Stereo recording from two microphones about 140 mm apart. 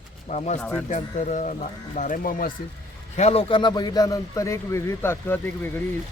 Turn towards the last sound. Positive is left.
turn(degrees=15)  # may be behind; listen again after turning